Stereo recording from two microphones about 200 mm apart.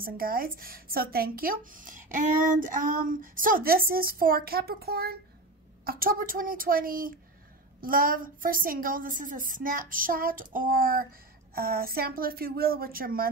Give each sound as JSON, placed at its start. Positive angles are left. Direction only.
{"t": 0.0, "sound": "a woman's voice", "side_deg": -45}